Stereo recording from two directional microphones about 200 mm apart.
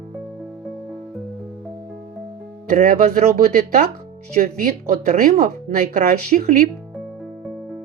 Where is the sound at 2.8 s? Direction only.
40° right (ahead or behind).